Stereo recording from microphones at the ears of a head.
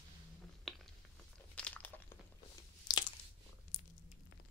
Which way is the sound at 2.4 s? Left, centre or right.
Left.